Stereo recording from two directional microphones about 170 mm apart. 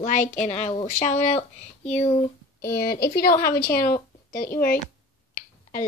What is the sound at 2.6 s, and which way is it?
A woman's voice, 65° left (ahead or behind).